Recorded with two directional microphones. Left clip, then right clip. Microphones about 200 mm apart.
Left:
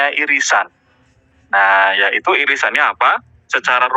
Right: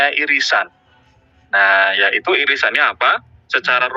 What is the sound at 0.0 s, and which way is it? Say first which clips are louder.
Speech: even; 40° left (ahead or behind).